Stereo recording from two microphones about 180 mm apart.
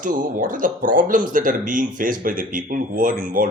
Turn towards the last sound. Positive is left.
turn(degrees=-50)  # may be behind; listen again after turning